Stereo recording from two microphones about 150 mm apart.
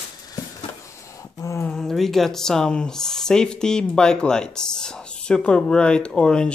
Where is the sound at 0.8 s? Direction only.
20° left (ahead or behind).